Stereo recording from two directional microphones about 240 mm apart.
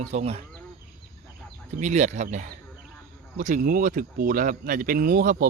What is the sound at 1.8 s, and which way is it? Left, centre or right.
Speech, right.